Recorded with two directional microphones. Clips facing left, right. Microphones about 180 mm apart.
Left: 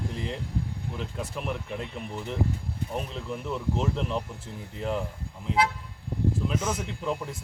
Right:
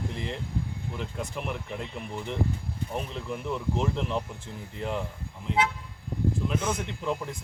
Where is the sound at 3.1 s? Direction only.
Centre (ahead or behind).